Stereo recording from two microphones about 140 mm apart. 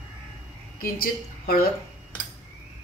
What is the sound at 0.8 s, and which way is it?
Speech, 90° left.